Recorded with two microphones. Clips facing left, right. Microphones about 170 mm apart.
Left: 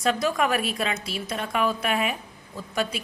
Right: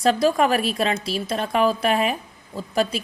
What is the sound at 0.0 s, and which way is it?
A woman's voice, 30° right (ahead or behind).